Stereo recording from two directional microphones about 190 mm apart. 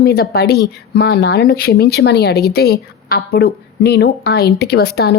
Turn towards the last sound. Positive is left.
turn(degrees=55)  # may be behind; listen again after turning